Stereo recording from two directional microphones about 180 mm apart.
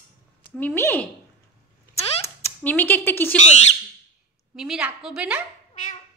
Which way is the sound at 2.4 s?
10° left (ahead or behind).